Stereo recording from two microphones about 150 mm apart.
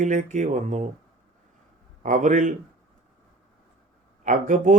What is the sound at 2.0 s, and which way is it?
Speech, 60° right (ahead or behind).